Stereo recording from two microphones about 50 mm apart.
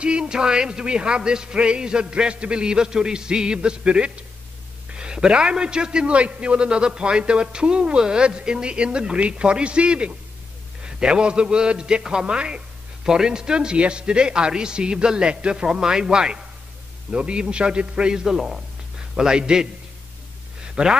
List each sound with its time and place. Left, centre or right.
0.0 s a man's voice: centre
20.8 s a man's voice: centre